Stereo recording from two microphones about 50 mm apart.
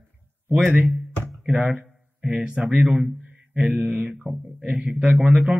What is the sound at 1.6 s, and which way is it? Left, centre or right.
Speech, right.